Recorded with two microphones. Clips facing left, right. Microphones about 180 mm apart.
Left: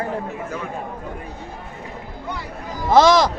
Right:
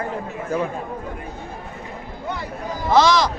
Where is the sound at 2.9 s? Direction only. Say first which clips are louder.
Left 3 dB; 50° left (ahead or behind).